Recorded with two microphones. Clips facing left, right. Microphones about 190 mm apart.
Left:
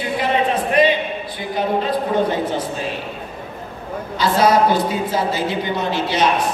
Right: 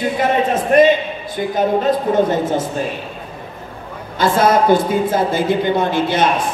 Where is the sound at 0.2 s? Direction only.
45° right (ahead or behind).